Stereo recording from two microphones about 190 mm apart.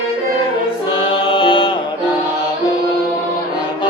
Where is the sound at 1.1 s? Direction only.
25° left (ahead or behind).